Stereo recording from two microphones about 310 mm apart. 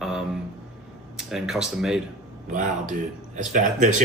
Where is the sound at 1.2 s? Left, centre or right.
Centre.